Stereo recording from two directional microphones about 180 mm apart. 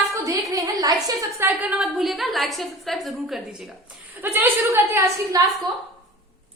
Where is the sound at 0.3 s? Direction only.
20° right (ahead or behind).